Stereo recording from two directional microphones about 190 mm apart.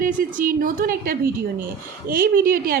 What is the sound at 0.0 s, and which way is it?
A woman's voice, 45° right (ahead or behind).